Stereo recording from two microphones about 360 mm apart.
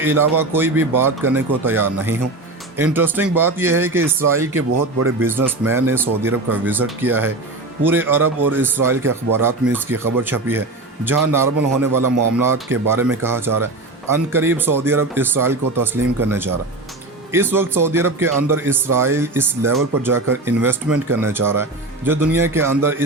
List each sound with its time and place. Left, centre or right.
0.0 s speech: centre
4.5 s speech: right
5.2 s speech: centre
11.8 s speech: right
12.4 s speech: centre